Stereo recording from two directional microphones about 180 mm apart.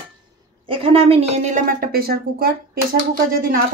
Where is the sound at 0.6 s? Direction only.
30° right (ahead or behind); by 2.5 s 55° right (ahead or behind).